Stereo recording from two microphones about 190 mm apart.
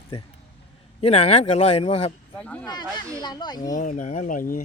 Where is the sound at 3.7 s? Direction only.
40° left (ahead or behind).